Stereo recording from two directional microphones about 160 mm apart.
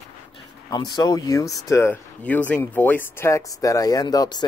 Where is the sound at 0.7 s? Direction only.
25° left (ahead or behind).